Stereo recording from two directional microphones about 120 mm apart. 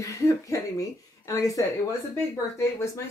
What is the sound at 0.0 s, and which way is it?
Speech, 25° left (ahead or behind).